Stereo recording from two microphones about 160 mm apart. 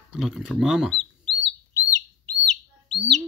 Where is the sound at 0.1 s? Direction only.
5° right (ahead or behind).